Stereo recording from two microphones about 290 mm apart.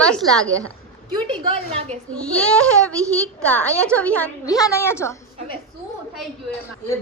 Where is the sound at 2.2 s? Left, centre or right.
Centre.